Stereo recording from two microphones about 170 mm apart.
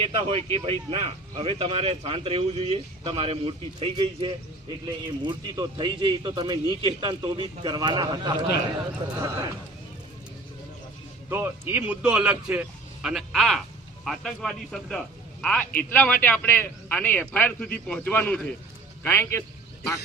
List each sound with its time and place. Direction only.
0.0 s a man's voice: 35° right (ahead or behind)
11.3 s a man's voice: 10° right (ahead or behind); by 19.5 s 15° left (ahead or behind)